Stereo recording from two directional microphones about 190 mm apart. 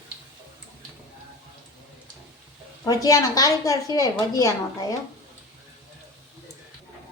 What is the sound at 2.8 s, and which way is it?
A woman's voice, 20° left (ahead or behind).